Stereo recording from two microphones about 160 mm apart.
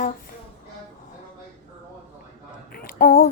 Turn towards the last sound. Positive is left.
turn(degrees=65)  # may be behind; listen again after turning